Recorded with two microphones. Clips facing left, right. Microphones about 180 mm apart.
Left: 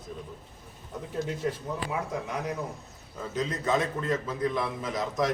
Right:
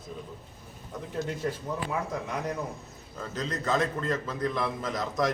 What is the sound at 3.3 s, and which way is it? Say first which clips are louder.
A man's voice: left 1 dB; 10° left (ahead or behind).